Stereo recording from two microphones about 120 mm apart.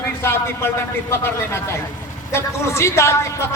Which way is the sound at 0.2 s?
20° left (ahead or behind).